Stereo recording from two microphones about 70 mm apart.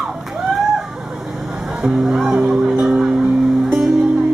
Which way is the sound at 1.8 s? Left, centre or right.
Centre.